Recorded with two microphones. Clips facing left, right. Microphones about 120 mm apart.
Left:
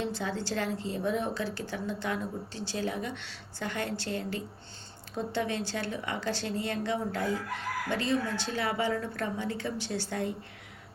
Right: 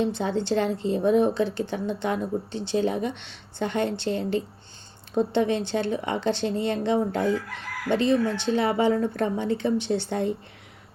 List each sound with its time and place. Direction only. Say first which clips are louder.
0.0 s a woman's voice: right 8 dB; 20° right (ahead or behind)